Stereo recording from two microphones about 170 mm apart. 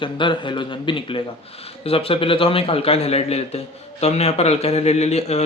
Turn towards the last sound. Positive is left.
turn(degrees=40)  # may be behind; listen again after turning